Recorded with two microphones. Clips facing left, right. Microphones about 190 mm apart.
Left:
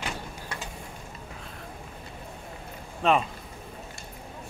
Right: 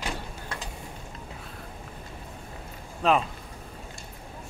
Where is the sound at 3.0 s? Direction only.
Centre (ahead or behind).